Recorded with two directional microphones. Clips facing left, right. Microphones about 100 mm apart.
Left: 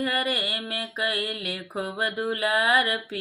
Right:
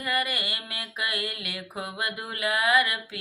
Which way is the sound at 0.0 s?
35° left (ahead or behind).